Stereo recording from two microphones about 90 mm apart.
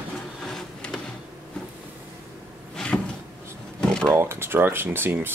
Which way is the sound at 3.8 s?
10° left (ahead or behind).